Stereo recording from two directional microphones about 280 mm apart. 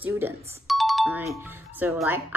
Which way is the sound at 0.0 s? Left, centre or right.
Centre.